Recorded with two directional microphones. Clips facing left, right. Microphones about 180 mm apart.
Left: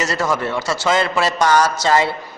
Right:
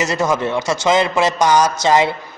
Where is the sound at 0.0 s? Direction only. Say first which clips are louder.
Right 2 dB; 20° right (ahead or behind).